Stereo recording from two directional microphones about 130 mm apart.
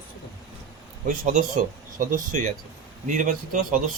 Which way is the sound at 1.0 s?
90° right.